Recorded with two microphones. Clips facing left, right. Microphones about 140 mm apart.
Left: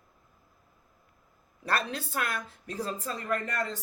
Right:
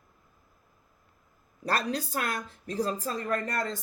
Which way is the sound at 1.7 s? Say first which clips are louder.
Right 2 dB; 35° right (ahead or behind).